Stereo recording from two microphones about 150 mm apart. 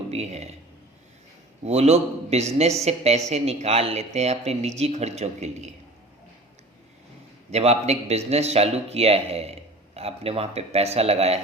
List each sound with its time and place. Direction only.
0.1 s a man's voice: 45° right (ahead or behind)
1.6 s a man's voice: 45° right (ahead or behind)
7.5 s a man's voice: 45° right (ahead or behind)